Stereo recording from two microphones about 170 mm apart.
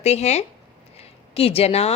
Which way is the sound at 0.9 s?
35° left (ahead or behind).